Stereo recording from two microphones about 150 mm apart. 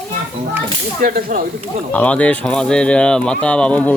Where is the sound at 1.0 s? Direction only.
75° right (ahead or behind).